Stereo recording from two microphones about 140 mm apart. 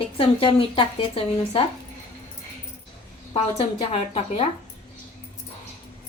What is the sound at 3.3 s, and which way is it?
A woman's voice, 45° left (ahead or behind).